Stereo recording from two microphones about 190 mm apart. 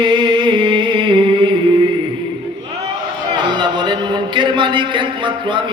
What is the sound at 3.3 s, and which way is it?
A man's voice, 25° right (ahead or behind).